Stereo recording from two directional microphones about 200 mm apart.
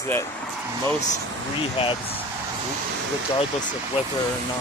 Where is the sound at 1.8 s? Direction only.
25° left (ahead or behind).